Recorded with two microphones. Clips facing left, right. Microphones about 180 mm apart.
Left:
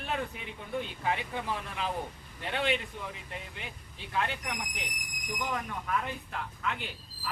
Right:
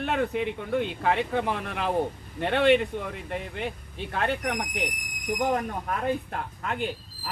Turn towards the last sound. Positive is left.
turn(degrees=-45)  # may be behind; listen again after turning